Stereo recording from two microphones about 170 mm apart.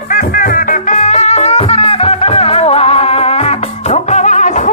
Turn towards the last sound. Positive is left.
turn(degrees=45)  # may be behind; listen again after turning